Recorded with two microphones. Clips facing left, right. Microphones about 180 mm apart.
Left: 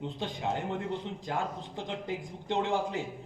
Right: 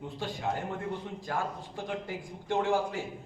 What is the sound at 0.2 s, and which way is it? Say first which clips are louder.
Speech: right 1 dB; 20° left (ahead or behind).